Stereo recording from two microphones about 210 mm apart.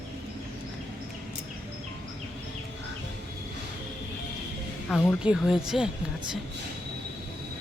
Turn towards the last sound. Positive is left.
turn(degrees=0)  # may be behind; listen again after turning